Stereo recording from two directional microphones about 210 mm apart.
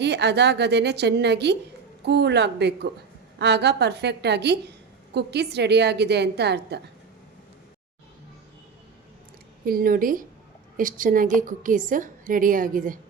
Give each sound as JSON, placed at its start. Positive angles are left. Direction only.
{"t": 0.0, "sound": "a woman's voice", "side_deg": -55}
{"t": 9.6, "sound": "a woman's voice", "side_deg": -45}